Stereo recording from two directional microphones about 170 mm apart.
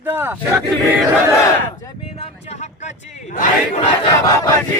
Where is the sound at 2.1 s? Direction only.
35° left (ahead or behind).